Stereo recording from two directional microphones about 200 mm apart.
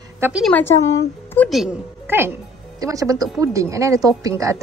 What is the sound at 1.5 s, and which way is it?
A woman's voice, 5° right (ahead or behind).